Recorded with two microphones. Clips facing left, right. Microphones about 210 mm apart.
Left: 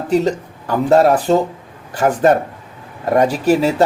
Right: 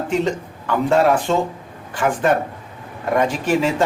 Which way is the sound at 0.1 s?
40° left (ahead or behind).